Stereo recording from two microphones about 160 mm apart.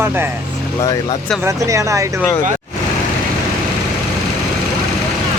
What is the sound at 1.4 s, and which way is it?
Speech, 20° right (ahead or behind).